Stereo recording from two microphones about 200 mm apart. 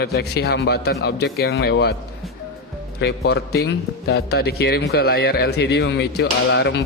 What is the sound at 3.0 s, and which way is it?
Speech, 55° left (ahead or behind).